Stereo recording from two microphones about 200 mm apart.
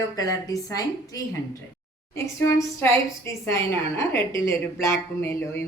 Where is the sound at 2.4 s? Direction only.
10° left (ahead or behind).